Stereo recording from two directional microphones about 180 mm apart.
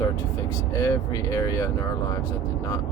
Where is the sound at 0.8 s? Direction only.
20° left (ahead or behind).